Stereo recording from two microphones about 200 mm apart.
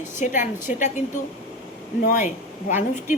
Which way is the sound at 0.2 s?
40° left (ahead or behind).